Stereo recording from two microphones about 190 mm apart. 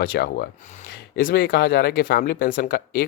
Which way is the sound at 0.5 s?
40° left (ahead or behind).